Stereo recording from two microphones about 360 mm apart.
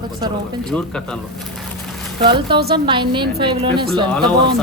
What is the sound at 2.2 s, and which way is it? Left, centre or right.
Speech, centre.